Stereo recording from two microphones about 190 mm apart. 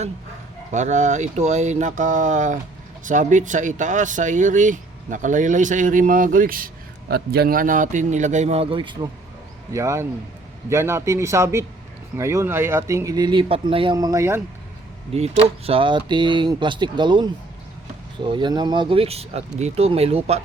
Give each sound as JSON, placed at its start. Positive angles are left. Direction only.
{"t": 0.7, "sound": "speech", "side_deg": -40}
{"t": 15.1, "sound": "speech", "side_deg": -30}